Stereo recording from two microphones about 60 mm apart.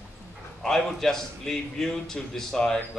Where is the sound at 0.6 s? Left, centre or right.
Centre.